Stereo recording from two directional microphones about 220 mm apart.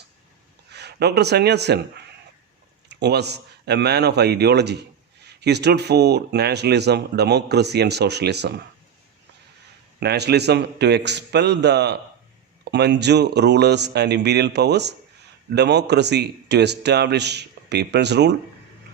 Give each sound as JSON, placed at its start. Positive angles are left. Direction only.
{"t": 0.7, "sound": "speech", "side_deg": -50}
{"t": 10.0, "sound": "speech", "side_deg": -50}